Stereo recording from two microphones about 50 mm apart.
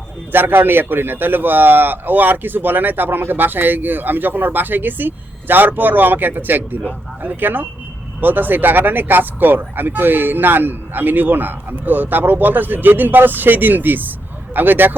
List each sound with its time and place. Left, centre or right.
0.3 s a man's voice: right